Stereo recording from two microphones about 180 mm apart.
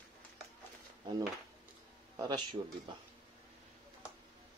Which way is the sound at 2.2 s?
25° right (ahead or behind).